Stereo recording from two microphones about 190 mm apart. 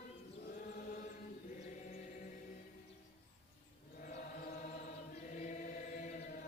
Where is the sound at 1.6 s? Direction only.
40° left (ahead or behind).